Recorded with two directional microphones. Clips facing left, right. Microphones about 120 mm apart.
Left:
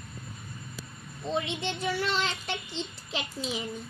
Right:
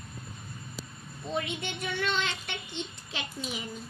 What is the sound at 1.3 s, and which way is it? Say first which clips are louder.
A child's voice: left 2 dB; 25° left (ahead or behind).